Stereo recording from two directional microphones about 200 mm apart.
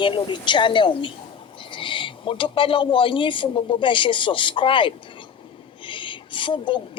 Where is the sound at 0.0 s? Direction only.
25° left (ahead or behind).